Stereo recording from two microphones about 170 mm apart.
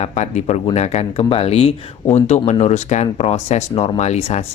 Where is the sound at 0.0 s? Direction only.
45° left (ahead or behind).